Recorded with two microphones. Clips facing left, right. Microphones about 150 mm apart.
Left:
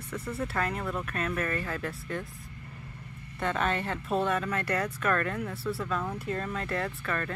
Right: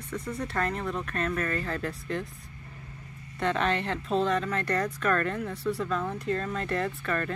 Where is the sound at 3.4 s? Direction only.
5° left (ahead or behind).